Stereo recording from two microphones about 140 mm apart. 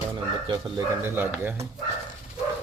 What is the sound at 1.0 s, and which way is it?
Speech, 15° right (ahead or behind).